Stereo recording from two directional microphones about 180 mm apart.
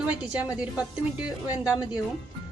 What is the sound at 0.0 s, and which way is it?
Speech, 5° right (ahead or behind).